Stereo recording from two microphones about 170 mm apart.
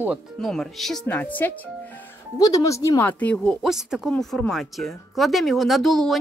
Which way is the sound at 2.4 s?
20° left (ahead or behind).